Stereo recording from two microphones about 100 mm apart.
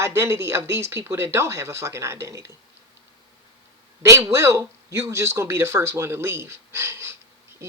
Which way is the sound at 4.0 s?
30° right (ahead or behind).